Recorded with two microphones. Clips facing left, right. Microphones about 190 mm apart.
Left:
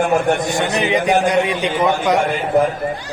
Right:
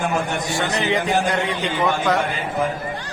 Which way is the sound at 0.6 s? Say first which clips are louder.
Left 4 dB; 20° left (ahead or behind).